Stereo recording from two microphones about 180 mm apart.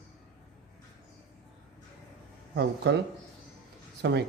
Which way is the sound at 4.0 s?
70° right (ahead or behind).